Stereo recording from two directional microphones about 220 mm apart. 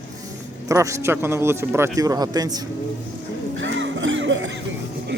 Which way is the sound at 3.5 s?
55° right (ahead or behind).